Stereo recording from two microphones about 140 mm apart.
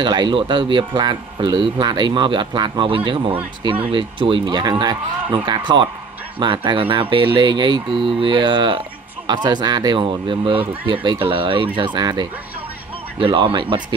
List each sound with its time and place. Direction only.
0.0 s speech: 30° right (ahead or behind)